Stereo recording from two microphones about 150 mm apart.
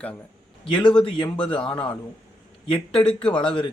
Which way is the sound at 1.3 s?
35° left (ahead or behind).